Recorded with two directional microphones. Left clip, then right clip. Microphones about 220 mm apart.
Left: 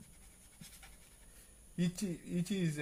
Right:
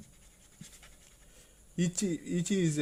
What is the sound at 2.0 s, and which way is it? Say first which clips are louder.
Speech: right 8 dB; 50° right (ahead or behind).